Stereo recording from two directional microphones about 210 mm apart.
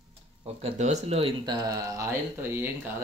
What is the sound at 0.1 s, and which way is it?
Speech, 25° right (ahead or behind).